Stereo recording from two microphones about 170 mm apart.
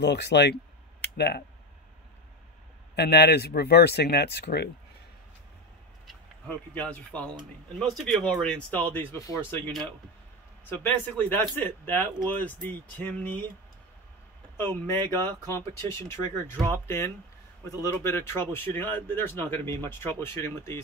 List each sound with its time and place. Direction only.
0.0 s speech: 90° left
3.0 s speech: 75° left (ahead or behind)
6.0 s speech: 10° left (ahead or behind)
10.7 s speech: 10° left (ahead or behind)
14.6 s speech: 15° left (ahead or behind)